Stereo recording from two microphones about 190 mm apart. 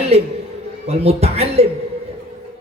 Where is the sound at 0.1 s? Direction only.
35° right (ahead or behind).